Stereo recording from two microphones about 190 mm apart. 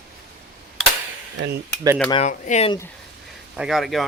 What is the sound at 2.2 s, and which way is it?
Speech, 35° left (ahead or behind).